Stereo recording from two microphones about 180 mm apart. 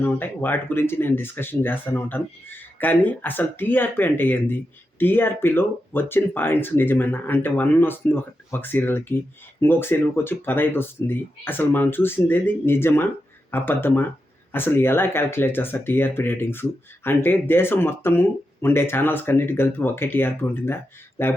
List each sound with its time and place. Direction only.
0.0 s speech: 10° left (ahead or behind)